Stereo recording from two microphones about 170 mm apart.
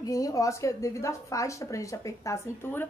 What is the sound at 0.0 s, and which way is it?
Speech, 20° left (ahead or behind).